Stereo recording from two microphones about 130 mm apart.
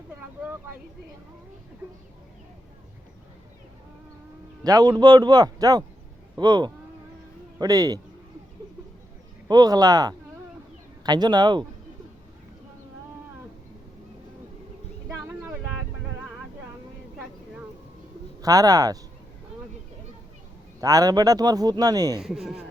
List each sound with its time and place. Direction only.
4.6 s a man's voice: 30° right (ahead or behind)
9.5 s a man's voice: 30° right (ahead or behind)
15.1 s a sound: 20° right (ahead or behind)
18.4 s a man's voice: 30° right (ahead or behind)
20.8 s a man's voice: 30° right (ahead or behind)
22.2 s speech: centre (ahead or behind)